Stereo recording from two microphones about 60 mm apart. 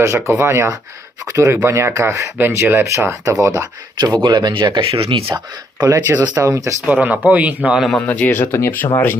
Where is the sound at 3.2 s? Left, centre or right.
Right.